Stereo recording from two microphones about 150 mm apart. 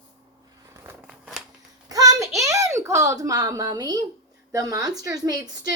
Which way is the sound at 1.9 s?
25° right (ahead or behind).